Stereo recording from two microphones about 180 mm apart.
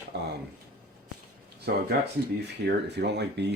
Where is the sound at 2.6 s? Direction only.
70° right (ahead or behind).